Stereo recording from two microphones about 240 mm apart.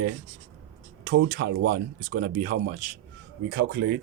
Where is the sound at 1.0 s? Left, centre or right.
Right.